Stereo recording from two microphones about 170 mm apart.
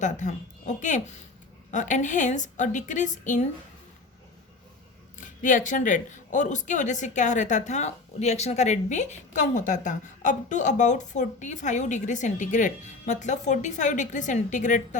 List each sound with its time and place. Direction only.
0.0 s speech: 45° left (ahead or behind)
5.1 s speech: 50° left (ahead or behind)